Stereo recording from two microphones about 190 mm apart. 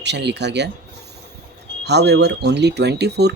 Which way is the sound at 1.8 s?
60° right (ahead or behind).